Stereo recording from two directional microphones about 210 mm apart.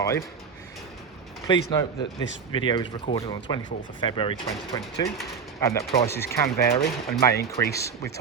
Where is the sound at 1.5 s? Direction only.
20° left (ahead or behind).